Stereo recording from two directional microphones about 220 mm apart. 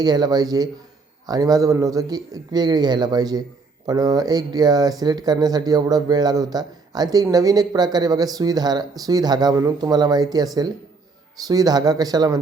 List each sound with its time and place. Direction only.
0.0 s speech: 20° right (ahead or behind)